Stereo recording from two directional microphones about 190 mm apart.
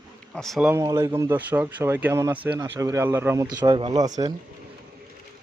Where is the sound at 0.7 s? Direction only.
15° right (ahead or behind).